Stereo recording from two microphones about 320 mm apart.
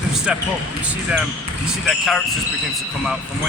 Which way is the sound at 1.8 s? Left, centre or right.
Centre.